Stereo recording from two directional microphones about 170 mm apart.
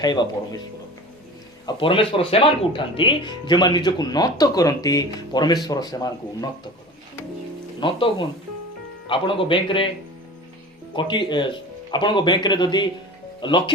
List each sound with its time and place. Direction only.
0.0 s speech: 25° left (ahead or behind)
1.6 s speech: 30° left (ahead or behind)
7.8 s a man's voice: 30° left (ahead or behind)
10.9 s speech: 30° left (ahead or behind)